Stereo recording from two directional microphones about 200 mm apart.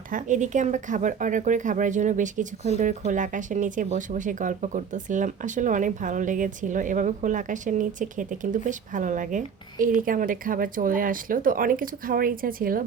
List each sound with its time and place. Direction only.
0.1 s speech: 40° right (ahead or behind)